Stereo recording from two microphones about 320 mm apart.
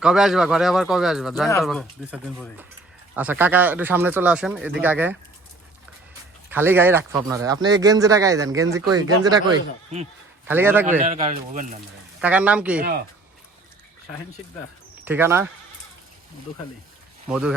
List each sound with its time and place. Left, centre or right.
0.0 s speech: centre
6.5 s a man's voice: centre
10.4 s a man's voice: centre
11.0 s speech: right
12.2 s speech: centre
15.0 s a man's voice: centre
17.2 s speech: centre